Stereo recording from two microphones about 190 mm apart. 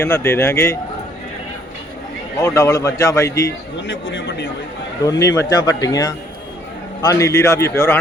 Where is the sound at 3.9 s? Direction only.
65° left (ahead or behind).